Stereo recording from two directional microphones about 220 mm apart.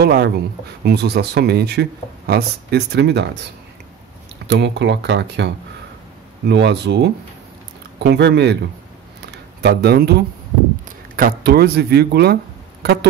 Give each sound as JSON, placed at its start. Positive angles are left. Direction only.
{"t": 0.0, "sound": "speech", "side_deg": -45}
{"t": 4.5, "sound": "speech", "side_deg": -50}
{"t": 9.6, "sound": "speech", "side_deg": -45}
{"t": 11.1, "sound": "speech", "side_deg": -45}